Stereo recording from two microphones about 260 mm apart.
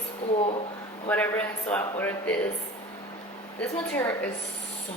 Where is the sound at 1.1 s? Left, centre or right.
Centre.